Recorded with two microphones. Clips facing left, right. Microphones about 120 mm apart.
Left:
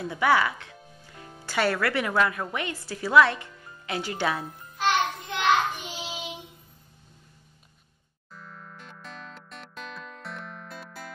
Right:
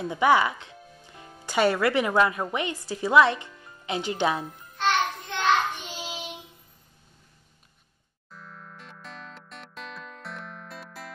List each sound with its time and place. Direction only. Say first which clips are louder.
0.0 s speech: right 2 dB; 20° right (ahead or behind)
4.5 s music: even; 5° left (ahead or behind)
8.4 s music: even; centre (ahead or behind)